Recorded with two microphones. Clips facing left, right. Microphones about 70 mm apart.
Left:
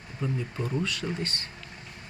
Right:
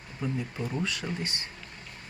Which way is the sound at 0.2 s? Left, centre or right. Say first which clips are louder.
Left 1 dB; centre.